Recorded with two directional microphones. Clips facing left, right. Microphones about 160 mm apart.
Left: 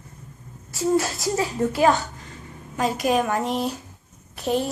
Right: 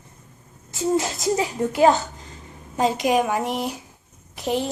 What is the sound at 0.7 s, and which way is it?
A child's voice, 20° right (ahead or behind).